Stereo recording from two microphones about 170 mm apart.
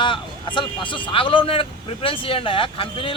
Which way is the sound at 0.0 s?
30° left (ahead or behind).